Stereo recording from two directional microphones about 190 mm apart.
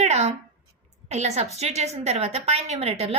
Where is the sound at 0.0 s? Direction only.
35° right (ahead or behind).